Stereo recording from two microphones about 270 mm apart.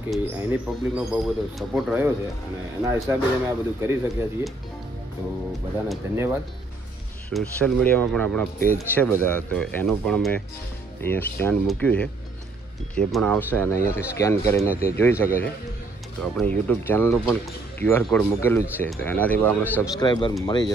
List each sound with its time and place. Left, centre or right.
0.1 s speech: centre
3.1 s speech: centre
5.9 s speech: centre
7.2 s speech: centre